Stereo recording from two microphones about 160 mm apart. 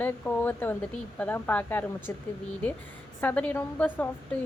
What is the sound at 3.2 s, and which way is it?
Speech, 10° left (ahead or behind).